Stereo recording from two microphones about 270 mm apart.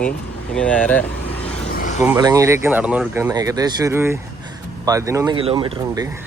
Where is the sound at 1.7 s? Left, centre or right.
Left.